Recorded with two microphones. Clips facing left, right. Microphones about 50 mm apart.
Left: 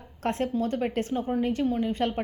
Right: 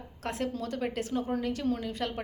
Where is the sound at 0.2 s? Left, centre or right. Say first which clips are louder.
Left 6 dB; left.